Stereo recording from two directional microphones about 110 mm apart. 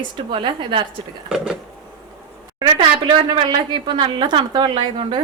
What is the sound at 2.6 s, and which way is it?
A woman's voice, 50° right (ahead or behind).